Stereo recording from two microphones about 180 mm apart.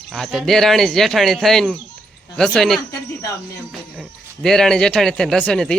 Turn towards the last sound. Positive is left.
turn(degrees=5)  # may be behind; listen again after turning